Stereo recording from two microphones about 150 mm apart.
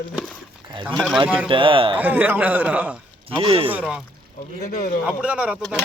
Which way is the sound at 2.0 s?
10° right (ahead or behind).